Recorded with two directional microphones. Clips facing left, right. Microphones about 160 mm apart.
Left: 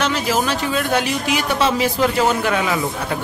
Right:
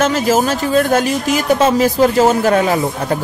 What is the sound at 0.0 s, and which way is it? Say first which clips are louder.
Speech: right 6 dB; 45° right (ahead or behind).